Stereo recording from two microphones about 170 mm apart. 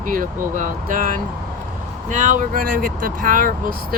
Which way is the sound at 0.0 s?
50° right (ahead or behind).